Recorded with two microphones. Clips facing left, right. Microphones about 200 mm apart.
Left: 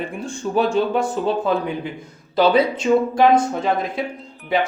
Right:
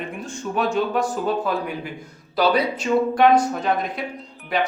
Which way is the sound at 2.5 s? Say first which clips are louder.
Left 4 dB; 25° left (ahead or behind).